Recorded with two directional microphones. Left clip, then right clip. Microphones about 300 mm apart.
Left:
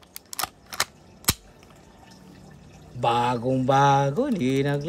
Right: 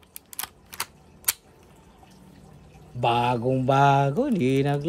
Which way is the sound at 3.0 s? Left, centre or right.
Centre.